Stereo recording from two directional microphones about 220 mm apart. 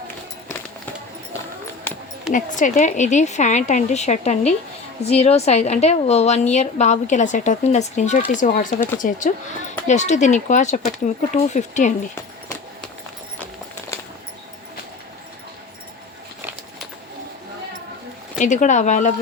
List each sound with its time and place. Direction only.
2.3 s a woman's voice: 35° left (ahead or behind)
18.3 s a woman's voice: 35° left (ahead or behind)